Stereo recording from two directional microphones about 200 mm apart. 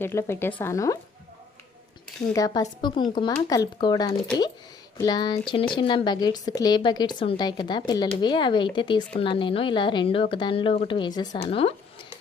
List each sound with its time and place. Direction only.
0.0 s speech: 10° left (ahead or behind)
2.3 s speech: 15° left (ahead or behind)
11.4 s a sound: 25° left (ahead or behind)